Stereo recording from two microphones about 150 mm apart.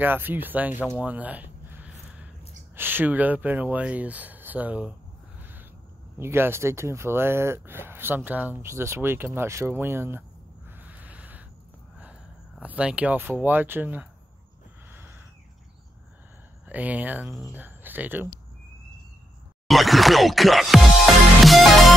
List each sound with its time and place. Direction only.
0.0 s speech: 15° right (ahead or behind)
1.0 s a sound: 10° right (ahead or behind)
2.7 s speech: 15° right (ahead or behind)
5.4 s a sound: 15° right (ahead or behind)
6.1 s speech: 15° right (ahead or behind)
10.7 s a sound: 10° right (ahead or behind)
12.0 s speech: 10° right (ahead or behind)
14.9 s a sound: 15° right (ahead or behind)
16.6 s speech: 10° right (ahead or behind)
17.3 s music: centre (ahead or behind)
17.6 s speech: 10° right (ahead or behind)
19.7 s music: centre (ahead or behind)